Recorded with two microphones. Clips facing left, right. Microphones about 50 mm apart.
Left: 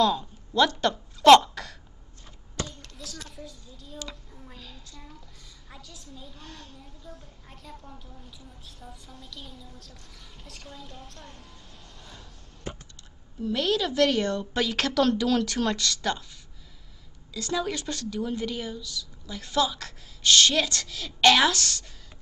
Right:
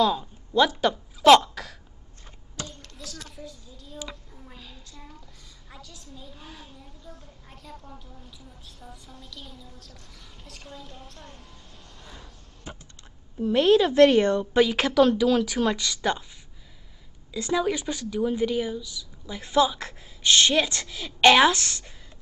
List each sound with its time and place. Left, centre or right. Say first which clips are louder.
0.0 s a sound: right 1 dB; centre
5.7 s a woman's voice: right 1 dB; centre
12.0 s a sound: right 3 dB; centre
13.4 s speech: right 7 dB; right
14.4 s speech: right 6 dB; centre
17.3 s speech: right 4 dB; centre